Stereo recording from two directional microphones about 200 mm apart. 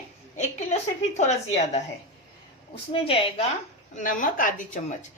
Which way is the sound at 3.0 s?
30° left (ahead or behind).